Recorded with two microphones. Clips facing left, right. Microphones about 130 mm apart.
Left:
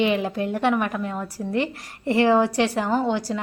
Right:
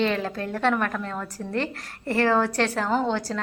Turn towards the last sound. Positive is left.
turn(degrees=15)  # may be behind; listen again after turning